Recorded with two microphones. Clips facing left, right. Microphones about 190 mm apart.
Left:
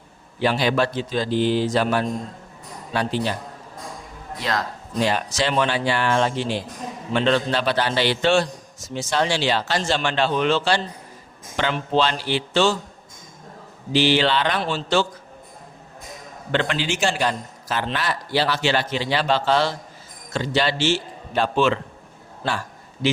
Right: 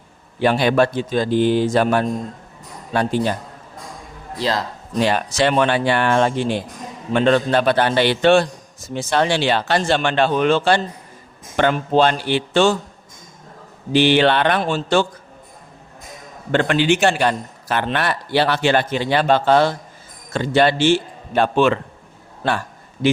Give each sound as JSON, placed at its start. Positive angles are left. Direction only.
{"t": 0.3, "sound": "a man's voice", "side_deg": -55}
{"t": 4.4, "sound": "a man's voice", "side_deg": -30}
{"t": 4.9, "sound": "a man's voice", "side_deg": -60}
{"t": 13.9, "sound": "a man's voice", "side_deg": -55}
{"t": 16.5, "sound": "a man's voice", "side_deg": -50}